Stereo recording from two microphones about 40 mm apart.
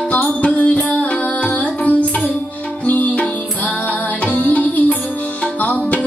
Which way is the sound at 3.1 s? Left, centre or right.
Left.